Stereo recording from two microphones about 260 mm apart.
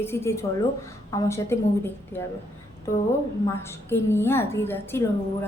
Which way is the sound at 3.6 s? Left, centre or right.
Centre.